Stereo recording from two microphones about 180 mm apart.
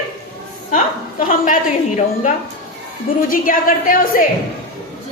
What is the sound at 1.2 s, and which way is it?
A woman's voice, 50° left (ahead or behind).